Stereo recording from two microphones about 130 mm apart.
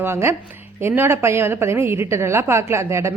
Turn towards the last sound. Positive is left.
turn(degrees=-20)  # may be behind; listen again after turning